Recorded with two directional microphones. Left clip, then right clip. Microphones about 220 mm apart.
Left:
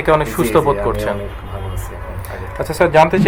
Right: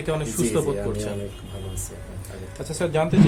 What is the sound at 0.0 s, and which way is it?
Speech, 40° left (ahead or behind).